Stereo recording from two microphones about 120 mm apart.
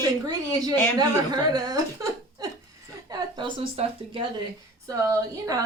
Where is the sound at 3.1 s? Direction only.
40° right (ahead or behind).